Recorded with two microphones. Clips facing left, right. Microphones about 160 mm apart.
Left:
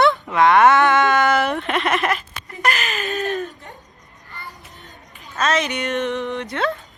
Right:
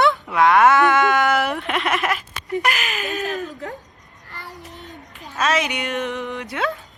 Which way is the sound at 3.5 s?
90° right.